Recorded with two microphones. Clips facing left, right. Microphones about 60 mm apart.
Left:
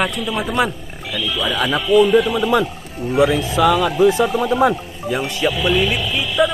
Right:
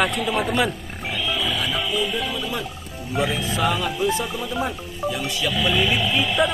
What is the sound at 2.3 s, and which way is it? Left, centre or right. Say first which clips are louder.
Speech: left 11 dB; left.